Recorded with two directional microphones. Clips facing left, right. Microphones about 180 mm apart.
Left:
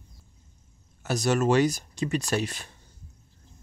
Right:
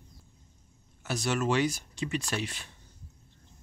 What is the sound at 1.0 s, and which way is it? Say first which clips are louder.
Speech: left 6 dB; 40° left (ahead or behind).